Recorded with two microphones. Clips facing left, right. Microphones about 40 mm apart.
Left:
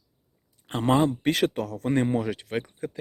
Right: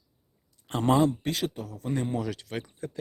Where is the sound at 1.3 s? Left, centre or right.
Left.